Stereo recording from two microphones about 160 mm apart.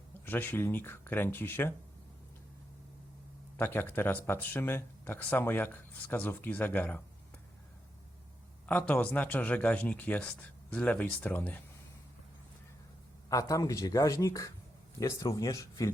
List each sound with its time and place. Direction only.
0.3 s speech: 10° left (ahead or behind)
3.6 s speech: 15° left (ahead or behind)
8.6 s speech: 10° left (ahead or behind)
13.3 s speech: 20° left (ahead or behind)